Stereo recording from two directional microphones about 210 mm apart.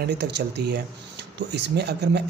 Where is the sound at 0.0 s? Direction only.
50° right (ahead or behind).